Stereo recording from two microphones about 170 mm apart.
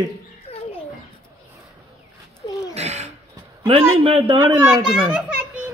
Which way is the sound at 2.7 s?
40° right (ahead or behind).